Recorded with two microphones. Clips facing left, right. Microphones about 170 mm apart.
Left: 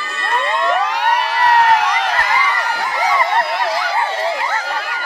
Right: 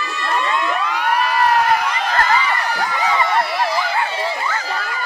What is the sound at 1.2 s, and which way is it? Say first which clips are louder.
Crowd: left 1 dB; 80° left.